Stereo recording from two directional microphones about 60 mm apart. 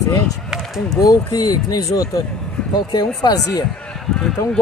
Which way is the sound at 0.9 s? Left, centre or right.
Left.